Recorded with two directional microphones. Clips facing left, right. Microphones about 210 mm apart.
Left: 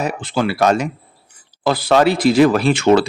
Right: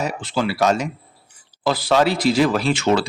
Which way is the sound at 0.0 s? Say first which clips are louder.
Left 3 dB; 55° left (ahead or behind).